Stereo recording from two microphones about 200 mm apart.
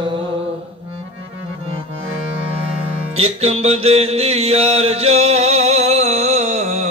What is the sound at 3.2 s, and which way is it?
Music, 30° right (ahead or behind).